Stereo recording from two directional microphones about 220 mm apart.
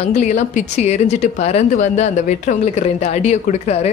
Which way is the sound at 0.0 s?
30° left (ahead or behind).